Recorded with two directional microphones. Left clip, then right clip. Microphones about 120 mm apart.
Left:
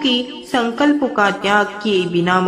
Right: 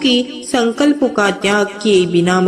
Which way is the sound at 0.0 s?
30° right (ahead or behind).